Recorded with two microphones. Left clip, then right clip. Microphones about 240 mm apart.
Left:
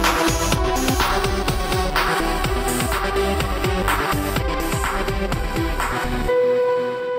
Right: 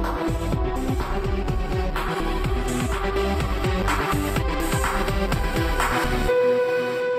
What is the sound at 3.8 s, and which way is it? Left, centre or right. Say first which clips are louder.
Music: left 3 dB; centre.